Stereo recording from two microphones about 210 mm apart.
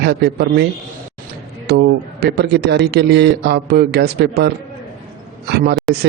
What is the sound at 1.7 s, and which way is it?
A man's voice, 50° right (ahead or behind).